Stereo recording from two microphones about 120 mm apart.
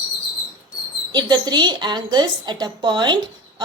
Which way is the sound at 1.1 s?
35° right (ahead or behind).